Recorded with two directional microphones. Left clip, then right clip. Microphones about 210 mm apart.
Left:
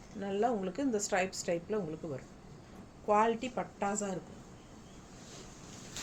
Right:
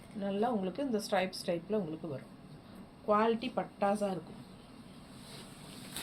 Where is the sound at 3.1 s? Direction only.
20° left (ahead or behind).